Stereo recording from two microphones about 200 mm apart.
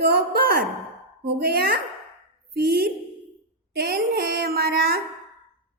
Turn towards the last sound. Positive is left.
turn(degrees=-50)  # may be behind; listen again after turning